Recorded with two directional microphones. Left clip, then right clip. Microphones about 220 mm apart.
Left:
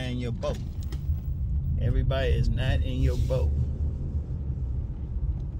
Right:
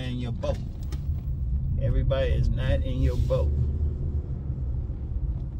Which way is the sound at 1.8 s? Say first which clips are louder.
Right 2 dB; 15° left (ahead or behind).